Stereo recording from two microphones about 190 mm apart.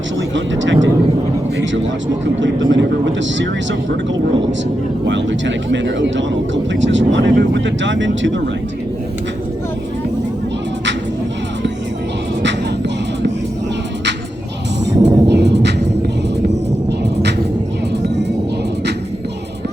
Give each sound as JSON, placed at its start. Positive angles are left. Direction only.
{"t": 0.3, "sound": "speech", "side_deg": -75}
{"t": 2.4, "sound": "speech", "side_deg": -80}
{"t": 5.0, "sound": "speech", "side_deg": -70}
{"t": 15.0, "sound": "vehicle", "side_deg": -65}
{"t": 18.0, "sound": "music", "side_deg": -65}